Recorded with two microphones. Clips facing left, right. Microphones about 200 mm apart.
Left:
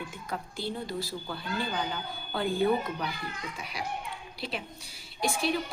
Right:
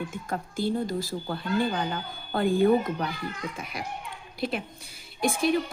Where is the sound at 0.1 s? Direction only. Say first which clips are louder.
Right 4 dB; 50° right (ahead or behind).